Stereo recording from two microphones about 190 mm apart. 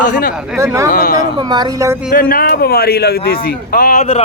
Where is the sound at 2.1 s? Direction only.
50° left (ahead or behind).